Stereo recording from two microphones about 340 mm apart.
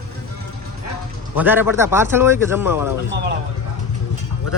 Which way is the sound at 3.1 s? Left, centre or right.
Right.